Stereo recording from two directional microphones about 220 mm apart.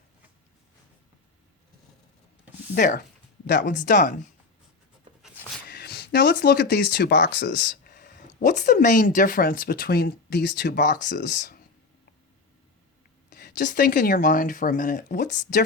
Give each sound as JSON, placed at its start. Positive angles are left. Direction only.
{"t": 2.7, "sound": "speech", "side_deg": 40}
{"t": 3.4, "sound": "speech", "side_deg": 50}
{"t": 3.8, "sound": "speech", "side_deg": 35}
{"t": 5.6, "sound": "speech", "side_deg": 50}
{"t": 7.3, "sound": "a sound", "side_deg": 50}
{"t": 8.3, "sound": "speech", "side_deg": 35}
{"t": 13.3, "sound": "a sound", "side_deg": 50}
{"t": 13.7, "sound": "speech", "side_deg": 40}